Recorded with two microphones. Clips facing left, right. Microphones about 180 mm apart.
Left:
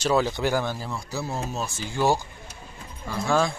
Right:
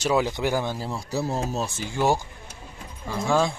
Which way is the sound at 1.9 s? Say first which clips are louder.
Left 1 dB; 20° right (ahead or behind).